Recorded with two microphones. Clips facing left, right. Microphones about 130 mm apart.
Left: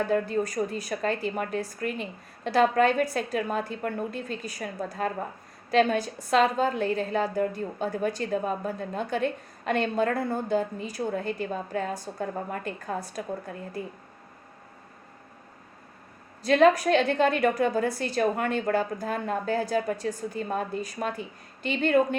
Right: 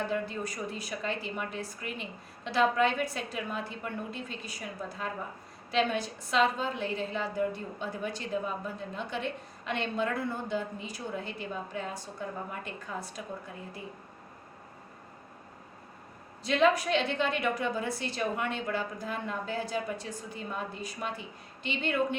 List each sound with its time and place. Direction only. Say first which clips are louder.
0.0 s a woman's voice: left 7 dB; 45° left (ahead or behind)
16.4 s a woman's voice: left 6 dB; 45° left (ahead or behind)